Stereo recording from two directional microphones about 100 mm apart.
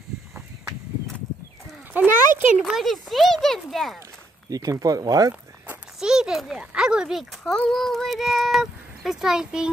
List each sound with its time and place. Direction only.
2.0 s a child's voice: 20° right (ahead or behind)
2.5 s speech: 5° right (ahead or behind)
4.5 s speech: 35° right (ahead or behind)
5.9 s speech: 5° right (ahead or behind)